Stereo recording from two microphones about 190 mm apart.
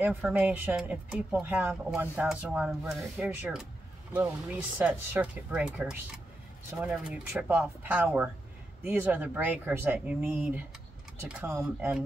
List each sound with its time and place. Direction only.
0.0 s speech: 10° right (ahead or behind)